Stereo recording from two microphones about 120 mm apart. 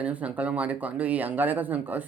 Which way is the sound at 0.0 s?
10° right (ahead or behind).